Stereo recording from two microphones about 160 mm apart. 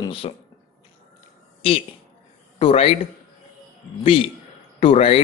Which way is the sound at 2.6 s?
35° left (ahead or behind).